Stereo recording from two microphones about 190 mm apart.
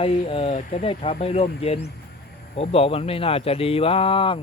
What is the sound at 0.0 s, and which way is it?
Speech, 30° left (ahead or behind).